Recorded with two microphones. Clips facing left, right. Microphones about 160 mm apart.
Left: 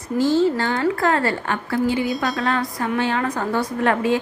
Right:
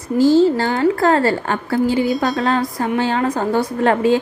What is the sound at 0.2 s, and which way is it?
A woman's voice, 35° right (ahead or behind).